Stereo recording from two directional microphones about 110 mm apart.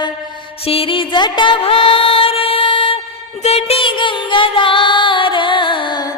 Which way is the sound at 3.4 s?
70° left (ahead or behind).